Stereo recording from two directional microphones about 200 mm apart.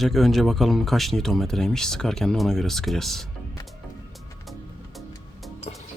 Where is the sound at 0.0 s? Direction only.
Centre (ahead or behind).